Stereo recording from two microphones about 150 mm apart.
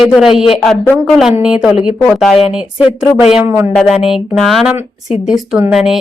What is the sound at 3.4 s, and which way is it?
Speech, 15° right (ahead or behind).